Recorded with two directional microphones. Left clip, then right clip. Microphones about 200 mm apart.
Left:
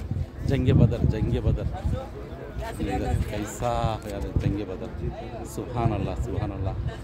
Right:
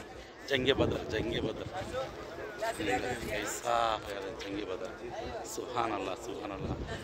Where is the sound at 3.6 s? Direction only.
Centre (ahead or behind).